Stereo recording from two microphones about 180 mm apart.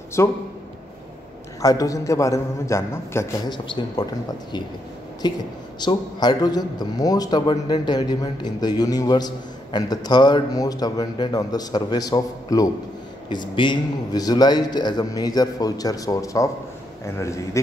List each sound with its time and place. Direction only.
0.2 s a man's voice: 15° left (ahead or behind)
1.6 s a man's voice: 20° left (ahead or behind)